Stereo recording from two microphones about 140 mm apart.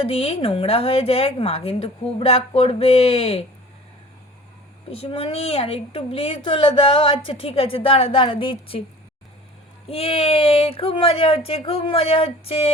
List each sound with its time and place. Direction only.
0.0 s speech: 45° left (ahead or behind)
4.9 s a woman's voice: 40° left (ahead or behind)
9.9 s a woman's voice: 45° left (ahead or behind)